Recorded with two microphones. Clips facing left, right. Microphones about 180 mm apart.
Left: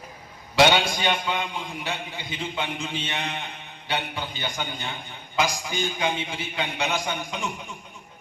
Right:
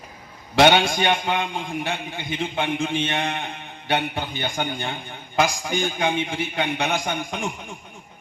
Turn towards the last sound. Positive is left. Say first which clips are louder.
# right 3 dB
turn(degrees=-50)  # may be behind; listen again after turning